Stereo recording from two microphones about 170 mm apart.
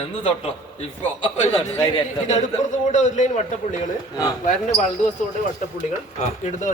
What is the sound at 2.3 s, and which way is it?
A man's voice, 45° left (ahead or behind).